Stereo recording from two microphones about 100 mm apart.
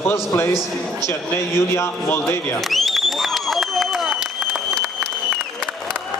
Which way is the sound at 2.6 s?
Centre (ahead or behind).